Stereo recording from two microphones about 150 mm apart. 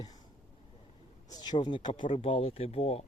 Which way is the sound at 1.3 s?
30° left (ahead or behind).